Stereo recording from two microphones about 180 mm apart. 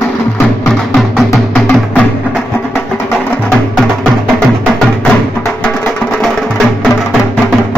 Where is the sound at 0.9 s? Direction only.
Centre (ahead or behind).